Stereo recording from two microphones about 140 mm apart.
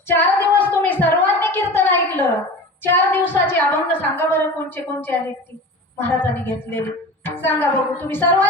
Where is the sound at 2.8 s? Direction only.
15° left (ahead or behind).